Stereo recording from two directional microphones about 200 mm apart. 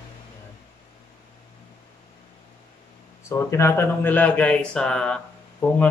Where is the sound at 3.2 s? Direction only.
15° left (ahead or behind).